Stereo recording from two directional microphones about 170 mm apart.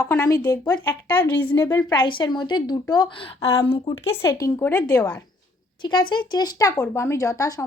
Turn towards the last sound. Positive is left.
turn(degrees=20)  # may be behind; listen again after turning